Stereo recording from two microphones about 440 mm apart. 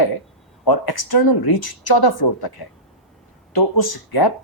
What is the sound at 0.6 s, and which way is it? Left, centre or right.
Speech, left.